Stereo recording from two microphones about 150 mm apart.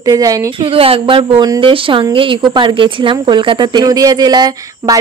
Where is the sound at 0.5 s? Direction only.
35° right (ahead or behind).